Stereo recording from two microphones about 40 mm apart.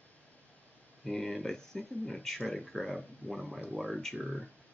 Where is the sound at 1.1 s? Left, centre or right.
Centre.